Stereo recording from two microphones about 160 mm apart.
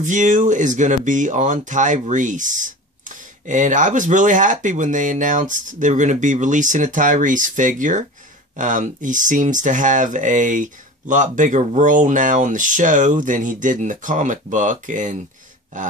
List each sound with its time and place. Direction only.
0.0 s speech: 50° right (ahead or behind)